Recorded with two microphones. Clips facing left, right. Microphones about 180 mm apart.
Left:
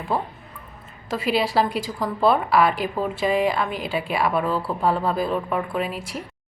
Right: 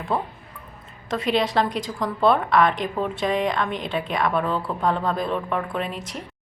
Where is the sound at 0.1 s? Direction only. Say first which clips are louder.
Even; 5° left (ahead or behind).